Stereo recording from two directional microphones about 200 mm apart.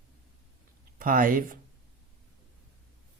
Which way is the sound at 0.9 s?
40° right (ahead or behind).